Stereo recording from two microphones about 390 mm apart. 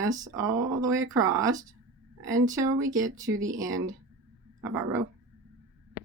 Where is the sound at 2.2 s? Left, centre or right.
Centre.